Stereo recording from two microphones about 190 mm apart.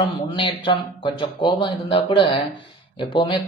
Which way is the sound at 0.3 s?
25° left (ahead or behind).